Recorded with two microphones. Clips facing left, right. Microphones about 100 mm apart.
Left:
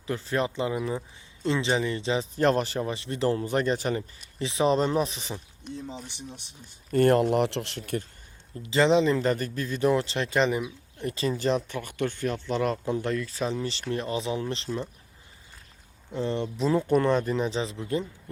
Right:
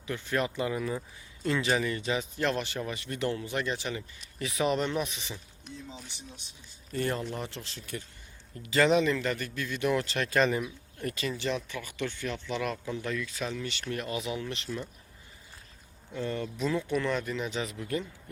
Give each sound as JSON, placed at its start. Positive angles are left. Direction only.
{"t": 0.1, "sound": "speech", "side_deg": 35}
{"t": 2.3, "sound": "speech", "side_deg": 40}
{"t": 4.4, "sound": "speech", "side_deg": 30}
{"t": 6.9, "sound": "speech", "side_deg": 60}
{"t": 8.6, "sound": "speech", "side_deg": 25}
{"t": 11.2, "sound": "speech", "side_deg": 40}
{"t": 16.1, "sound": "speech", "side_deg": 25}